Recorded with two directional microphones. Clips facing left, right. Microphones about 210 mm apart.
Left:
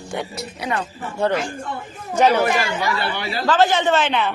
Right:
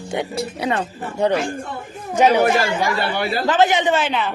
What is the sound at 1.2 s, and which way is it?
Speech, 15° right (ahead or behind).